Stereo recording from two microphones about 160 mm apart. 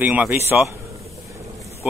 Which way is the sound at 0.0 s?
10° right (ahead or behind).